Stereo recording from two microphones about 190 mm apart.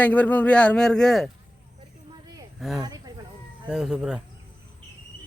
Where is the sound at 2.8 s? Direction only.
20° right (ahead or behind).